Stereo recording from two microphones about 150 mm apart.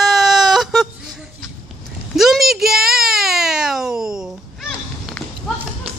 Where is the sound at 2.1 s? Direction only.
Centre (ahead or behind).